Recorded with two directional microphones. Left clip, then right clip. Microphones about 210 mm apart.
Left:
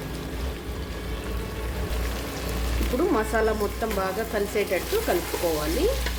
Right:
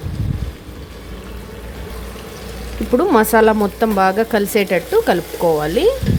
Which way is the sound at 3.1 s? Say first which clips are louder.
Right 13 dB; 50° right (ahead or behind).